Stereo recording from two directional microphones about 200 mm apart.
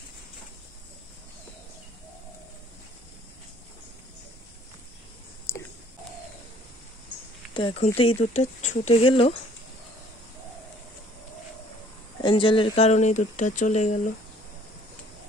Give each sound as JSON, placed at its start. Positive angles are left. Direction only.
{"t": 5.5, "sound": "a sound", "side_deg": 15}
{"t": 7.5, "sound": "speech", "side_deg": 30}
{"t": 12.2, "sound": "speech", "side_deg": 25}